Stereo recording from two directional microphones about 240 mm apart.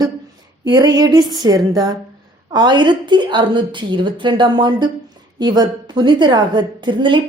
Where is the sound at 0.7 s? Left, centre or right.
Centre.